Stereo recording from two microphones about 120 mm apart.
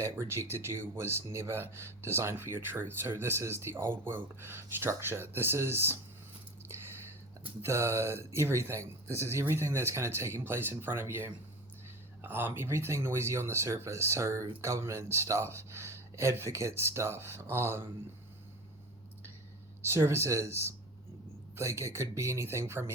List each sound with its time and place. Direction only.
0.0 s speech: 20° right (ahead or behind)
7.6 s speech: 20° right (ahead or behind)
19.8 s speech: 20° right (ahead or behind)